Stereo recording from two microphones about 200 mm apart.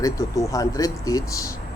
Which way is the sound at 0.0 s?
15° left (ahead or behind).